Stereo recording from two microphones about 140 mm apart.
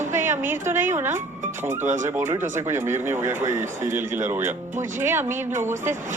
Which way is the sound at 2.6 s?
20° right (ahead or behind).